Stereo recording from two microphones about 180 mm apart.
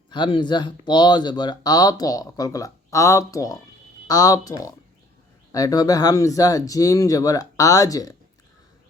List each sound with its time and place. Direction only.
0.1 s speech: 25° left (ahead or behind)